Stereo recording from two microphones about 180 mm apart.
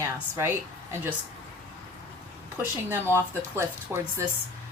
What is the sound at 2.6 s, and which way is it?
Speech, 10° right (ahead or behind).